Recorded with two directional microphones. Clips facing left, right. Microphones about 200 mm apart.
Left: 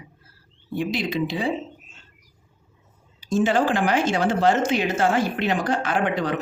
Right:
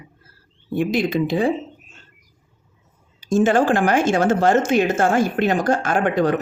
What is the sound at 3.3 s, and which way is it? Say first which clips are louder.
A woman's voice: right 4 dB; 50° right (ahead or behind).